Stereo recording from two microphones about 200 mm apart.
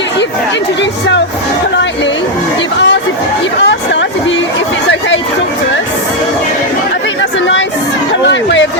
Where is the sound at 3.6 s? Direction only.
65° left (ahead or behind).